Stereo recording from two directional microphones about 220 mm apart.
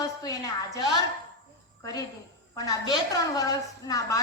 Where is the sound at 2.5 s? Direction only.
15° left (ahead or behind).